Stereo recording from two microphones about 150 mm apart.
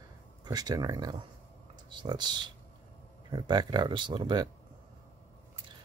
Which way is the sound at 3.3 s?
30° right (ahead or behind).